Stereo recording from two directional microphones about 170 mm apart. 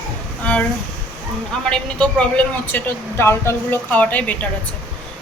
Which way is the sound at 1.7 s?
5° left (ahead or behind).